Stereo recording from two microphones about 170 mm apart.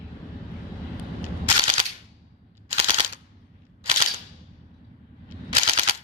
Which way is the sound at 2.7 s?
35° right (ahead or behind).